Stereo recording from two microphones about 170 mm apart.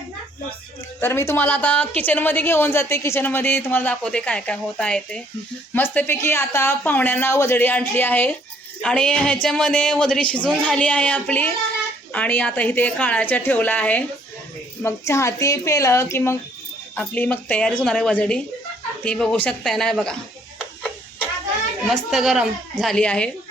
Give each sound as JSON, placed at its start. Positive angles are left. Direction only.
{"t": 0.9, "sound": "a woman's voice", "side_deg": 15}
{"t": 21.8, "sound": "speech", "side_deg": 0}